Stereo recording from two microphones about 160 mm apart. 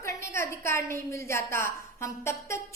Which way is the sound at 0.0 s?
15° left (ahead or behind).